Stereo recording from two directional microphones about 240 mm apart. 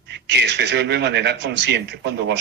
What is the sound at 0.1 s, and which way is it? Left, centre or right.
Speech, right.